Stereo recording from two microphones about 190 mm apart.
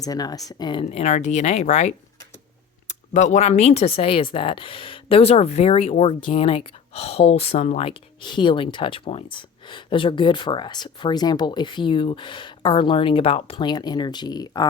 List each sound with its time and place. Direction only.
0.0 s speech: 20° left (ahead or behind)